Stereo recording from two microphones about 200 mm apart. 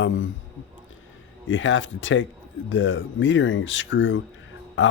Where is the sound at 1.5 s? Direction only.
70° left (ahead or behind).